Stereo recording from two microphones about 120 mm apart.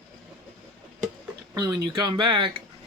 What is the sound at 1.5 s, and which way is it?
Speech, 35° right (ahead or behind).